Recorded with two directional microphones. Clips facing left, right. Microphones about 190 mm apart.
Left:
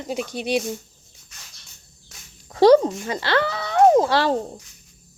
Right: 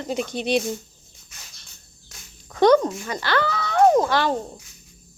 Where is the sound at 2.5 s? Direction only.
30° left (ahead or behind).